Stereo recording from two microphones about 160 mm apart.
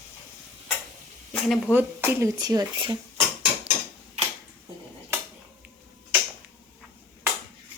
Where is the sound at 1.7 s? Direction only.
10° right (ahead or behind).